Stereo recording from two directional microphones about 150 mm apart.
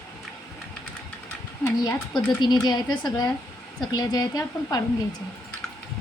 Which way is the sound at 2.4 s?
30° left (ahead or behind).